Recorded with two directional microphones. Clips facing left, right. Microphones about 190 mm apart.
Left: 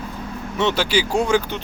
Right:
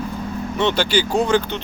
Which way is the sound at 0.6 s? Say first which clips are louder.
Right 1 dB; 5° left (ahead or behind).